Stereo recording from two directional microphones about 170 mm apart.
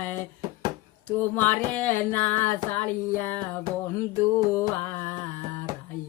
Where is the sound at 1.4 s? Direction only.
10° left (ahead or behind).